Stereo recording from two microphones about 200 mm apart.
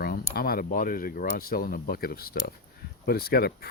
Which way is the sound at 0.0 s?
45° left (ahead or behind).